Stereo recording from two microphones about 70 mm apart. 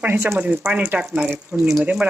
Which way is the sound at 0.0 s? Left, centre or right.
Right.